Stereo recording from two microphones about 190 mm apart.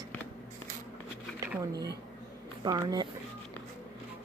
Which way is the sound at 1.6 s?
20° right (ahead or behind).